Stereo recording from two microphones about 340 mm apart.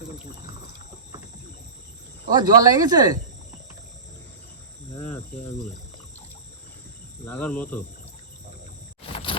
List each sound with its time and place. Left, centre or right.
2.3 s speech: centre
7.3 s speech: centre
9.0 s a sound: centre